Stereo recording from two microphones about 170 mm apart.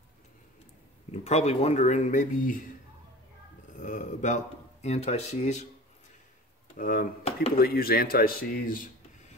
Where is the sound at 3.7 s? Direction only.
50° left (ahead or behind).